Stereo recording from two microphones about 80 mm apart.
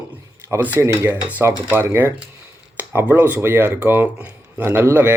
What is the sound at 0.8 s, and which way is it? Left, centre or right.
Speech, right.